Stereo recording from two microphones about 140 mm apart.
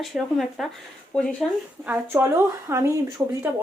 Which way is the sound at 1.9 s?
15° right (ahead or behind).